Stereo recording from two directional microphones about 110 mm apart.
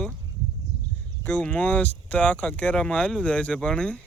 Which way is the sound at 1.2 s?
10° left (ahead or behind).